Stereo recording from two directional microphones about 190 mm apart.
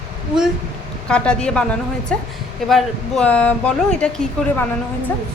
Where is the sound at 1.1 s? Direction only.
5° left (ahead or behind).